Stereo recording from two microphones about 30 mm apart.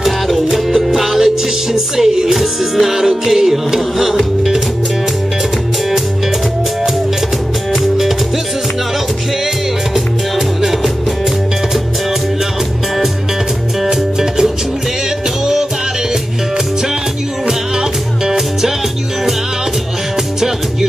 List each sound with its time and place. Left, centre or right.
0.0 s music: centre
7.7 s music: centre
9.9 s music: centre
17.5 s music: centre